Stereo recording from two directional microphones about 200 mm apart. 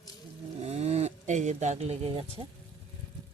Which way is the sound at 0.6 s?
35° right (ahead or behind).